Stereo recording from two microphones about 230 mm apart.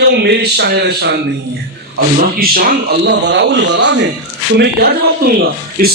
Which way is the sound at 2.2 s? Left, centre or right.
Right.